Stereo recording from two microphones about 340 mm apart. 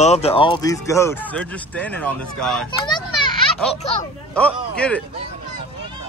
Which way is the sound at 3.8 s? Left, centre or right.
Centre.